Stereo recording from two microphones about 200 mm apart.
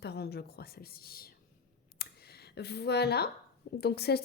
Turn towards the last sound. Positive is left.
turn(degrees=55)  # may be behind; listen again after turning